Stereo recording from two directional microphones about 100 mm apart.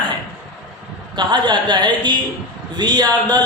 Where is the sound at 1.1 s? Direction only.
50° right (ahead or behind).